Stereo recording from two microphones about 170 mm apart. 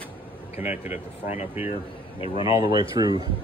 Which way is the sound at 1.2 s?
40° left (ahead or behind).